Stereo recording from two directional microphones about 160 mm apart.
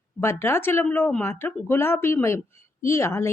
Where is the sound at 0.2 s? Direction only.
15° left (ahead or behind).